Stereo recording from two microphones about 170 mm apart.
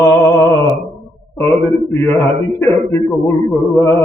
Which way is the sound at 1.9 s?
15° left (ahead or behind).